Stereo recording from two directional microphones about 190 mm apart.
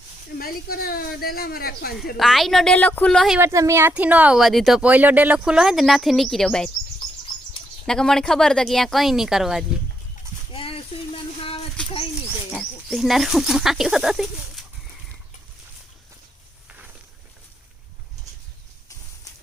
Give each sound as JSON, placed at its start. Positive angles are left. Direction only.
{"t": 0.3, "sound": "speech", "side_deg": 55}
{"t": 2.1, "sound": "speech", "side_deg": 0}
{"t": 3.4, "sound": "speech", "side_deg": -15}
{"t": 7.9, "sound": "speech", "side_deg": 5}
{"t": 10.5, "sound": "a sound", "side_deg": 30}
{"t": 12.5, "sound": "speech", "side_deg": 0}